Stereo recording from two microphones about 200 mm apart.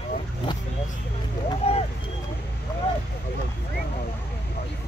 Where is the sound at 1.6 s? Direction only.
30° left (ahead or behind).